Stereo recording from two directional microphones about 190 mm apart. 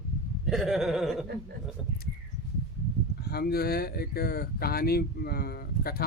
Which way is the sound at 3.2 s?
55° left (ahead or behind).